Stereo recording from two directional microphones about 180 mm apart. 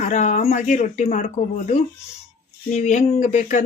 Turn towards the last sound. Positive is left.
turn(degrees=40)  # may be behind; listen again after turning